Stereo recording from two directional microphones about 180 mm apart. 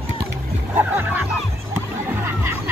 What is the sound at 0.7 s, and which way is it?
Music, 10° right (ahead or behind).